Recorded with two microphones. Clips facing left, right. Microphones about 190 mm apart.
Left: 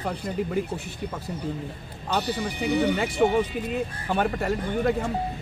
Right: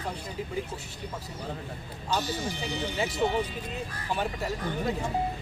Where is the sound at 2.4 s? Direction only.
60° left (ahead or behind).